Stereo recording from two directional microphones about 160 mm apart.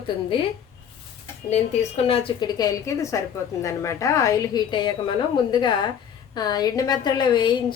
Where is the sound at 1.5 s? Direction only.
45° left (ahead or behind); by 5.1 s 30° left (ahead or behind).